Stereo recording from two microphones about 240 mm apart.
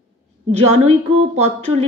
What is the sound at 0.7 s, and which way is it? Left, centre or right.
Speech, right.